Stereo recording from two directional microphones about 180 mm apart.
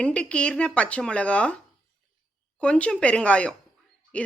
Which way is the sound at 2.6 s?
5° left (ahead or behind).